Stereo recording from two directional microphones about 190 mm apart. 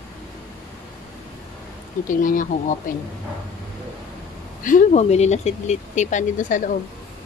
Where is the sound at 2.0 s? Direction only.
45° left (ahead or behind).